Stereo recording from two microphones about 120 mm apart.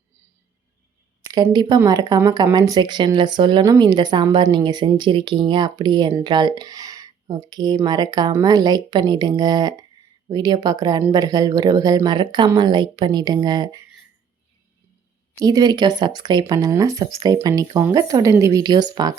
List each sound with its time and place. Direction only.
1.5 s speech: 35° right (ahead or behind)
15.4 s speech: 30° right (ahead or behind)